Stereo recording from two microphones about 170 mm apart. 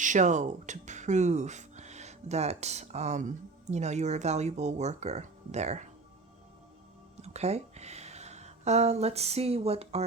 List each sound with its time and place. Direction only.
0.0 s speech: 45° right (ahead or behind)
7.2 s speech: 40° right (ahead or behind)